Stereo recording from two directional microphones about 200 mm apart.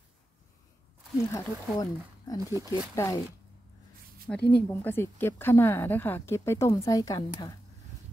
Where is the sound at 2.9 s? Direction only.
15° left (ahead or behind).